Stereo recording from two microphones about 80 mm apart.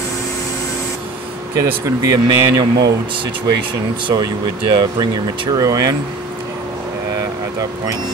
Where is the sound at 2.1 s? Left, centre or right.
Right.